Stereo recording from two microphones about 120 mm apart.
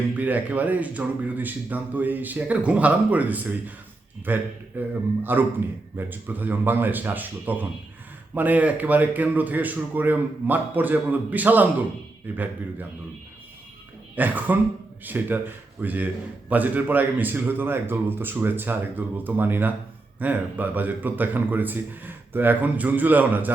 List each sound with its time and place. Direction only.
0.2 s a man's voice: 15° right (ahead or behind)
14.2 s a man's voice: 15° right (ahead or behind)